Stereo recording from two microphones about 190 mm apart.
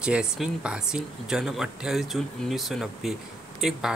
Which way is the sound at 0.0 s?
5° right (ahead or behind).